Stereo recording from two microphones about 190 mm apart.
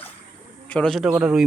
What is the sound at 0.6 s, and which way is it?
Speech, 5° left (ahead or behind).